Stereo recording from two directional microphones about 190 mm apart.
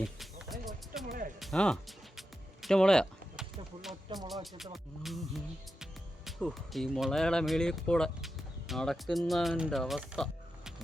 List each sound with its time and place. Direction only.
0.0 s a sound: centre (ahead or behind)
1.0 s music: 50° right (ahead or behind)
1.4 s music: centre (ahead or behind)
5.8 s speech: centre (ahead or behind)